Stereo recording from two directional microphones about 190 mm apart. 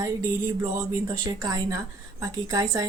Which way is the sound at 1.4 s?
20° right (ahead or behind).